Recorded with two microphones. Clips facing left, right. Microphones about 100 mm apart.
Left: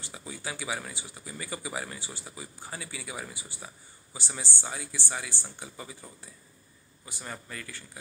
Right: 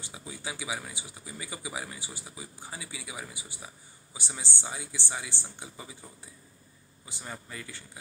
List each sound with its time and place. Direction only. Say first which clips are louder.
0.0 s speech: left 1 dB; 15° right (ahead or behind)